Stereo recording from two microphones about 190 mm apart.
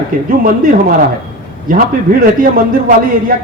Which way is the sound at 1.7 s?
50° right (ahead or behind).